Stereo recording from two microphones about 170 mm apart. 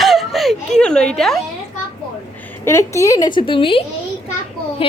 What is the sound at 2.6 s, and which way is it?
A woman's voice, 15° left (ahead or behind).